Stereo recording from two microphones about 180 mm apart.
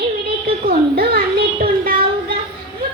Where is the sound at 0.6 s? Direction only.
55° right (ahead or behind).